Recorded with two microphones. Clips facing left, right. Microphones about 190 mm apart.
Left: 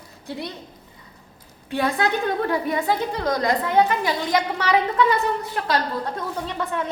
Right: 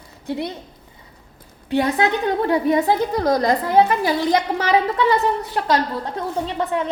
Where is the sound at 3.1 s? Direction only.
35° right (ahead or behind).